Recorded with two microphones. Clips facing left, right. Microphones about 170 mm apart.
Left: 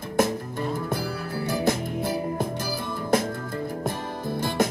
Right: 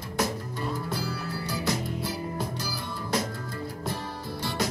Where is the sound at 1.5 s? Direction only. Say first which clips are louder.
Left 6 dB; 50° left (ahead or behind).